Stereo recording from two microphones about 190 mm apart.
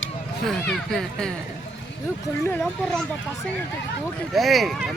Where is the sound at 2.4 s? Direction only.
10° left (ahead or behind).